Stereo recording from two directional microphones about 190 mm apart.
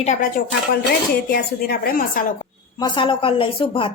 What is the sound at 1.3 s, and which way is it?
Speech, 55° left (ahead or behind).